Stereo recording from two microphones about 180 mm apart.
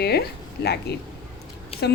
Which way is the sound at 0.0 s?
65° left (ahead or behind).